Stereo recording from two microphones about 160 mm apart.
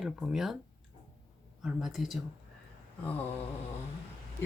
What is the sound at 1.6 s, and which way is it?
Speech, 5° right (ahead or behind).